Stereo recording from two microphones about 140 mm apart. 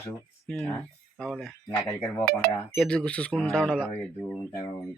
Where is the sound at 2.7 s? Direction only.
5° left (ahead or behind).